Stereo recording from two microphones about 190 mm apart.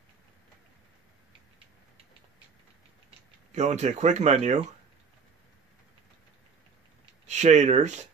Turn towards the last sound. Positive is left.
turn(degrees=-40)  # may be behind; listen again after turning